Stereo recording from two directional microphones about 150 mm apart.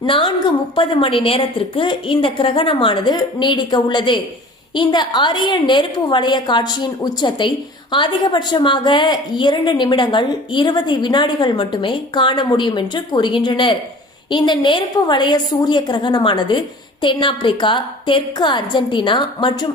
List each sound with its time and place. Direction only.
0.0 s a woman's voice: 35° left (ahead or behind)